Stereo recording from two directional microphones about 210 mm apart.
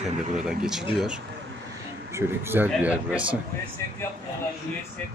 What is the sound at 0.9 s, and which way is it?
A man's voice, 5° right (ahead or behind).